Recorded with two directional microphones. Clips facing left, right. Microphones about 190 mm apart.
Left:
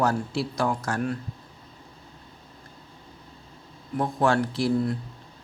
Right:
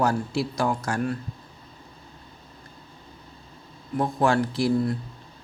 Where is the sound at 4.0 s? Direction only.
10° right (ahead or behind).